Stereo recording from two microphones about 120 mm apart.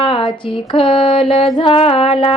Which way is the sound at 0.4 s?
45° left (ahead or behind).